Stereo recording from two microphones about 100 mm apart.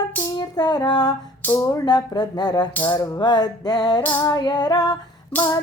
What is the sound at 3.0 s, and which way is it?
Music, 45° left (ahead or behind).